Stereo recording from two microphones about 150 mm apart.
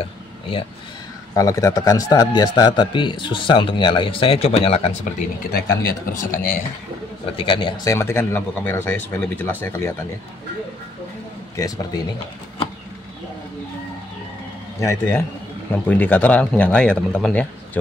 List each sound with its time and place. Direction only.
0.0 s a sound: 35° left (ahead or behind)
1.3 s a man's voice: 20° left (ahead or behind); by 4.9 s 40° left (ahead or behind)
5.5 s speech: 70° left (ahead or behind)
7.3 s speech: 35° left (ahead or behind); by 9.9 s 15° left (ahead or behind)
11.5 s a man's voice: 25° left (ahead or behind)
14.8 s speech: 15° left (ahead or behind)